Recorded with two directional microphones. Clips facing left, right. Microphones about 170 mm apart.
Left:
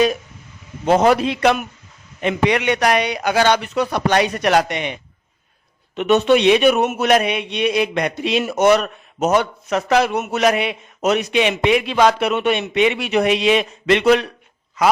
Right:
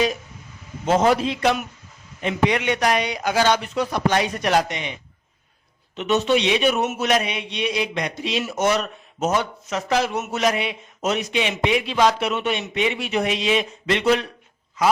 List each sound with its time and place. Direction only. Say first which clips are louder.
0.9 s a man's voice: left 4 dB; 65° left (ahead or behind)
6.0 s a man's voice: left 5 dB; 60° left (ahead or behind)